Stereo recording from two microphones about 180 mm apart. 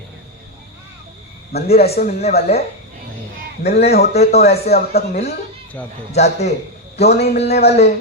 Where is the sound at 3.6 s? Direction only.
65° left (ahead or behind).